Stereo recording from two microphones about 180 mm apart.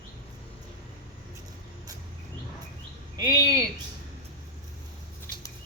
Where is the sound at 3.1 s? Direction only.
20° right (ahead or behind).